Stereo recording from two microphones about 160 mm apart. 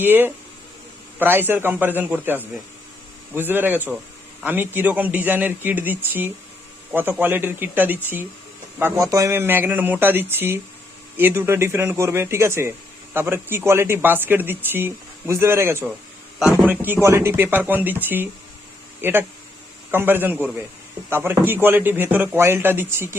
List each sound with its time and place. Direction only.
0.0 s speech: 10° right (ahead or behind)